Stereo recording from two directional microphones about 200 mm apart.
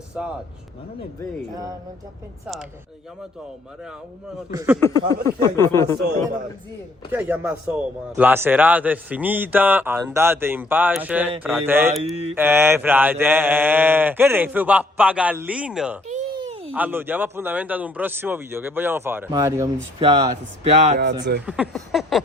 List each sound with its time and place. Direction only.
0.1 s speech: 5° right (ahead or behind)
4.5 s speech: 10° right (ahead or behind)
4.8 s a sound: 15° left (ahead or behind)
7.1 s speech: 10° right (ahead or behind)
16.0 s a sound: 35° right (ahead or behind)
16.7 s speech: 10° right (ahead or behind)
20.0 s speech: 25° right (ahead or behind)
21.0 s speech: 60° right (ahead or behind)
21.4 s a sound: 5° right (ahead or behind)